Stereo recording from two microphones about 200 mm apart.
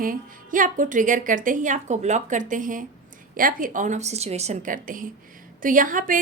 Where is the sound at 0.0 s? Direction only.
45° right (ahead or behind).